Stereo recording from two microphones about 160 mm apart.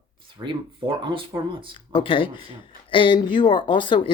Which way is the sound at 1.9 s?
35° left (ahead or behind).